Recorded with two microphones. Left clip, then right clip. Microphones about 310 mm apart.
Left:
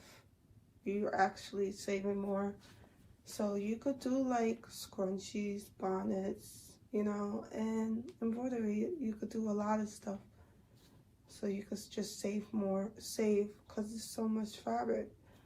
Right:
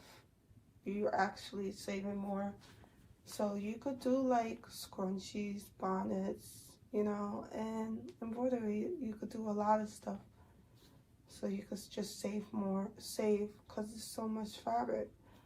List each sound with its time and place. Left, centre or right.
0.9 s speech: centre
11.3 s speech: centre